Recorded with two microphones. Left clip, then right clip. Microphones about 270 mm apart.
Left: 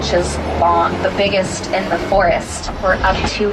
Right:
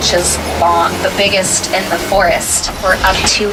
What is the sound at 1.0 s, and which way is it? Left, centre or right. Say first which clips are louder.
Speech: right 3 dB; centre.